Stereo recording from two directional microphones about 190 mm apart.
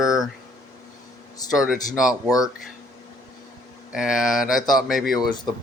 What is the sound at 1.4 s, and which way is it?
Speech, 5° right (ahead or behind).